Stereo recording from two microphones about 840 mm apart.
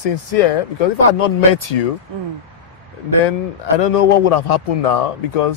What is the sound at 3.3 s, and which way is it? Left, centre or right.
A man's voice, left.